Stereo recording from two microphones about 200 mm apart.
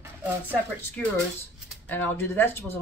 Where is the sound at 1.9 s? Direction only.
10° left (ahead or behind).